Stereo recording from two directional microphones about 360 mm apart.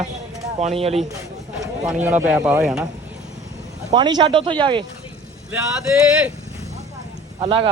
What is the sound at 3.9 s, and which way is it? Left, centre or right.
Speech, centre.